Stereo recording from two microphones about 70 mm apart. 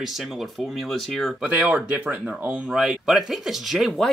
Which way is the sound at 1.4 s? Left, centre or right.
Centre.